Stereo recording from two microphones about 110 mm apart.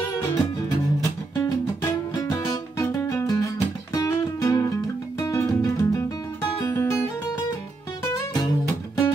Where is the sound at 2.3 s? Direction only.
35° left (ahead or behind).